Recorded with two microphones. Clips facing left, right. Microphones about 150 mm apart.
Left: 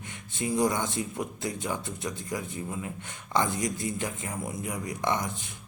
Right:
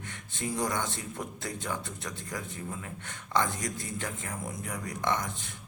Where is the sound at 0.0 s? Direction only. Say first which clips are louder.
Left 3 dB; 10° left (ahead or behind).